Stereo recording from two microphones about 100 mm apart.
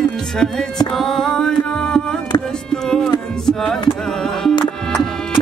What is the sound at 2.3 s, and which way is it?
Music, 45° left (ahead or behind).